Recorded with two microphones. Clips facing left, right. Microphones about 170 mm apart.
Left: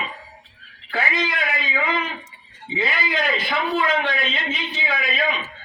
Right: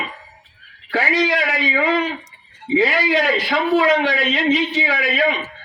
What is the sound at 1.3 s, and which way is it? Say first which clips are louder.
A man's voice: right 6 dB; 85° right.